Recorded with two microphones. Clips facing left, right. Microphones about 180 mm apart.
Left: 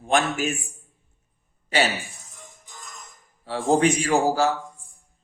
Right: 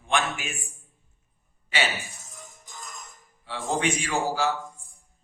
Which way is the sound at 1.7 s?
40° left (ahead or behind).